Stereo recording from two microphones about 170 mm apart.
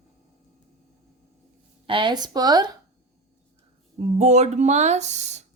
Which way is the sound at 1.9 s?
30° right (ahead or behind).